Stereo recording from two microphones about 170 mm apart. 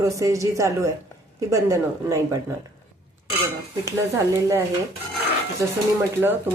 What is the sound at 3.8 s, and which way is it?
Speech, 15° right (ahead or behind).